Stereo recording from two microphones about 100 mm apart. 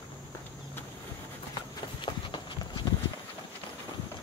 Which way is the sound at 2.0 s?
50° left (ahead or behind).